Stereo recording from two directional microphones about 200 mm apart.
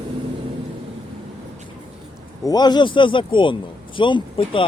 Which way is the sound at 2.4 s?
20° left (ahead or behind).